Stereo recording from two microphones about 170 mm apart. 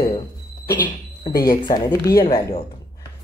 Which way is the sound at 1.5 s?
25° left (ahead or behind).